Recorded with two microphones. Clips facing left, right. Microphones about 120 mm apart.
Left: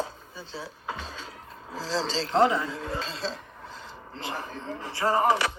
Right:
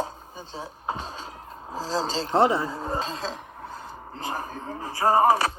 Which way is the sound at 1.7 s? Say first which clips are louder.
Right 2 dB; 40° right (ahead or behind).